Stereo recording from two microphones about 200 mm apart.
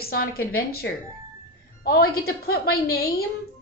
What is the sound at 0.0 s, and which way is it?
A woman's voice, 50° left (ahead or behind).